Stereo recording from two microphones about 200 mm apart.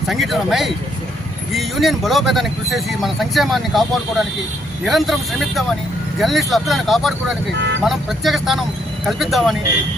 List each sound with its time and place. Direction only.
0.1 s speech: centre (ahead or behind)
7.5 s speech: 60° right (ahead or behind)
7.9 s speech: centre (ahead or behind)